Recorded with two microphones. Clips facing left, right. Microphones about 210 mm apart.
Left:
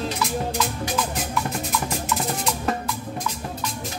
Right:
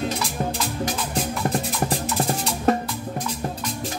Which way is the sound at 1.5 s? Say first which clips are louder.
Right 3 dB; 35° right (ahead or behind).